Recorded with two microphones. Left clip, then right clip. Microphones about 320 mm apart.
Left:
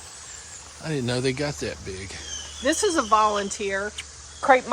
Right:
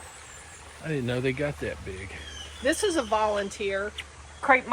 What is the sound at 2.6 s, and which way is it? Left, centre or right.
Speech, left.